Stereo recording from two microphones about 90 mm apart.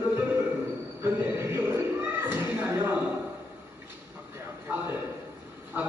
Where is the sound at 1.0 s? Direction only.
30° right (ahead or behind).